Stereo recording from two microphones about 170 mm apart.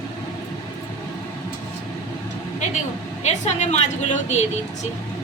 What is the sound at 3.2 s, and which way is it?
Speech, 40° left (ahead or behind).